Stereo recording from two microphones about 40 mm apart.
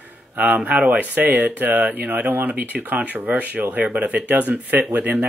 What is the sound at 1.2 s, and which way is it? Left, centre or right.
Speech, right.